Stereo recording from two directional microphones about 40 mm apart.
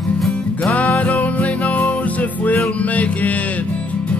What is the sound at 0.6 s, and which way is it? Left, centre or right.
Music, left.